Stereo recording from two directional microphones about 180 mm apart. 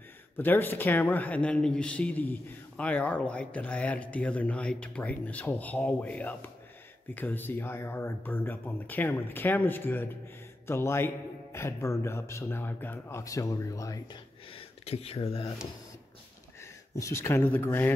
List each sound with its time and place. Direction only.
0.4 s speech: 10° left (ahead or behind)
14.5 s speech: 35° left (ahead or behind)
16.6 s speech: 15° left (ahead or behind)